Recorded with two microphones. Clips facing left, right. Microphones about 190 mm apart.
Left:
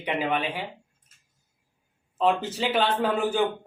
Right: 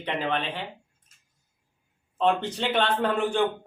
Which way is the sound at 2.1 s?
5° left (ahead or behind).